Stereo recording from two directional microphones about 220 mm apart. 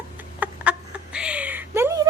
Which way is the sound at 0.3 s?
5° right (ahead or behind).